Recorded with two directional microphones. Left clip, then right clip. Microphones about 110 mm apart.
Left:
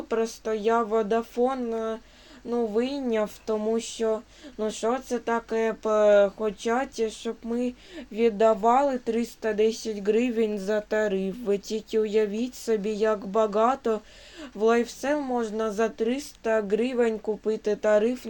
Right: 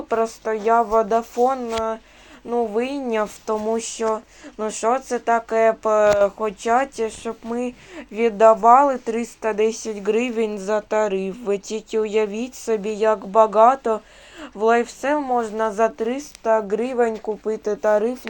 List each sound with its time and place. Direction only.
0.1 s speech: 30° left (ahead or behind)
0.7 s speech: 5° left (ahead or behind)
7.5 s speech: centre (ahead or behind)
8.4 s speech: 15° right (ahead or behind); by 15.6 s 5° left (ahead or behind)
15.6 s speech: 15° left (ahead or behind)